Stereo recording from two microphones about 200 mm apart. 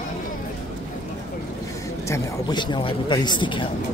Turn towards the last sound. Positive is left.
turn(degrees=25)  # may be behind; listen again after turning